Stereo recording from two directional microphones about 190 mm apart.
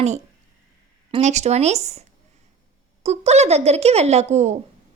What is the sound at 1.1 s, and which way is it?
A woman's voice, 35° right (ahead or behind).